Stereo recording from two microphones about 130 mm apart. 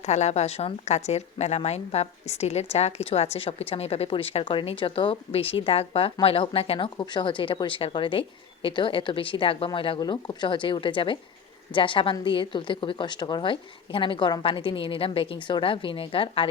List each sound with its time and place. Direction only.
0.0 s a woman's voice: 60° left (ahead or behind); by 16.5 s 45° left (ahead or behind)